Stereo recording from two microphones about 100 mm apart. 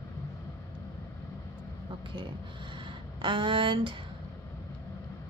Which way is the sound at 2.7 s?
55° right (ahead or behind).